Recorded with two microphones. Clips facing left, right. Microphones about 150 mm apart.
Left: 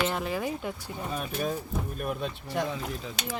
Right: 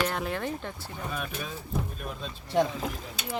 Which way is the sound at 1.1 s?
30° left (ahead or behind).